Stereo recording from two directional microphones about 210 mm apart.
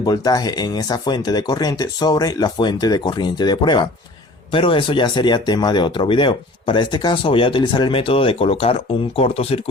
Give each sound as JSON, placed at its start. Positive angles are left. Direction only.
{"t": 0.0, "sound": "speech", "side_deg": 20}